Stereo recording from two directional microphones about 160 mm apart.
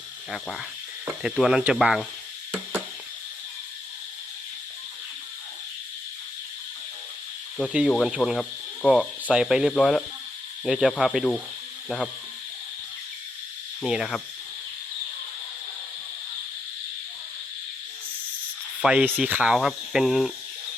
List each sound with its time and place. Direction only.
1.0 s speech: 5° right (ahead or behind)
7.7 s speech: 5° right (ahead or behind)
9.3 s speech: 5° right (ahead or behind)
13.8 s speech: centre (ahead or behind)
18.8 s speech: 5° right (ahead or behind)